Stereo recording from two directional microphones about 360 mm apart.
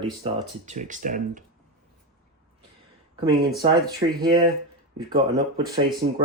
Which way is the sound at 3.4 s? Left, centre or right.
Centre.